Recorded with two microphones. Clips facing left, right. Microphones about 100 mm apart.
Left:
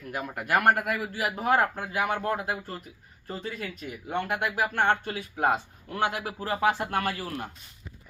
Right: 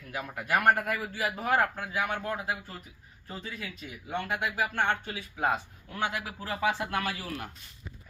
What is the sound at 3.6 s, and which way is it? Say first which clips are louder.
Speech: left 5 dB; 55° left (ahead or behind).